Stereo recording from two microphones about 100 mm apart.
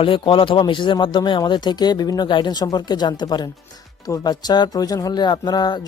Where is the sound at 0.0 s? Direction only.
60° left (ahead or behind).